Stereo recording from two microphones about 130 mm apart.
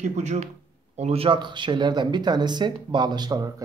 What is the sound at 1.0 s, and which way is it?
Speech, 50° right (ahead or behind).